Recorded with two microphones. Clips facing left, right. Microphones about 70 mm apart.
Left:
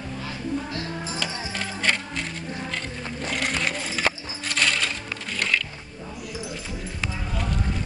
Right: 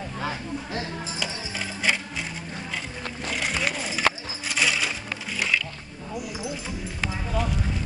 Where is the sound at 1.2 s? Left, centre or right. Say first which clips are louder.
Left 2 dB; centre.